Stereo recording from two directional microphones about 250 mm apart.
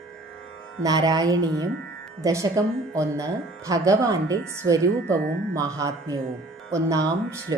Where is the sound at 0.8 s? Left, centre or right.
Centre.